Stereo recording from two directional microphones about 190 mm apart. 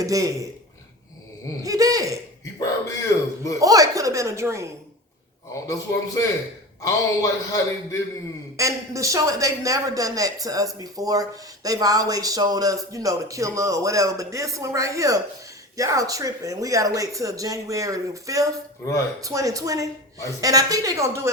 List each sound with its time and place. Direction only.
0.0 s speech: 20° right (ahead or behind)
1.6 s a woman's voice: 20° right (ahead or behind)
2.4 s speech: 15° left (ahead or behind)
3.6 s speech: 15° right (ahead or behind)
5.6 s a man's voice: 15° left (ahead or behind)
8.5 s a woman's voice: 15° right (ahead or behind)